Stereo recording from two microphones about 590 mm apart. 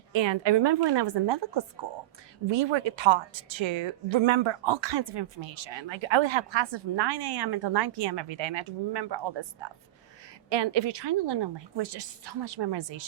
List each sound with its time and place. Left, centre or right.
0.1 s a woman's voice: right